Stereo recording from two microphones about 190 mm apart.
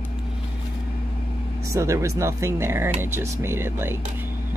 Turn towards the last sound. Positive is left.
turn(degrees=-10)  # may be behind; listen again after turning